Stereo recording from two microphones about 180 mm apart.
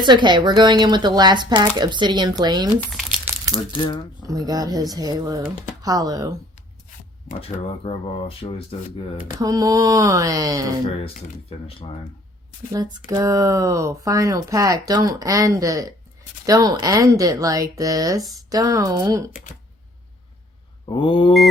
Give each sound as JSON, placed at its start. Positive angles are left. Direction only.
{"t": 0.0, "sound": "speech", "side_deg": -25}
{"t": 2.9, "sound": "crumpling", "side_deg": 0}
{"t": 4.3, "sound": "speech", "side_deg": -20}
{"t": 6.9, "sound": "speech", "side_deg": 40}
{"t": 9.4, "sound": "speech", "side_deg": -20}
{"t": 10.8, "sound": "speech", "side_deg": 30}
{"t": 12.7, "sound": "speech", "side_deg": -20}
{"t": 20.8, "sound": "mantra", "side_deg": 30}